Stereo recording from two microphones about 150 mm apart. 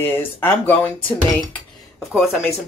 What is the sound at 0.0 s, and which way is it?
Speech, 15° left (ahead or behind).